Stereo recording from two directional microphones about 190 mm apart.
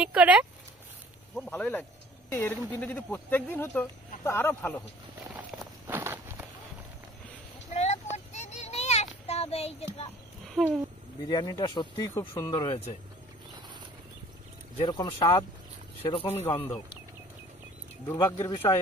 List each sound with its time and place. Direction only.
0.0 s speech: 5° right (ahead or behind)
1.3 s speech: 5° left (ahead or behind)
5.3 s walk: 10° right (ahead or behind)
7.7 s child singing: 35° left (ahead or behind)
10.6 s speech: centre (ahead or behind)
11.2 s speech: 20° left (ahead or behind)
14.8 s speech: 25° left (ahead or behind)
18.1 s speech: 25° left (ahead or behind)